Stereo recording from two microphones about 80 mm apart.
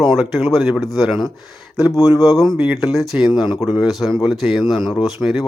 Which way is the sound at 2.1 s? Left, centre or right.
Right.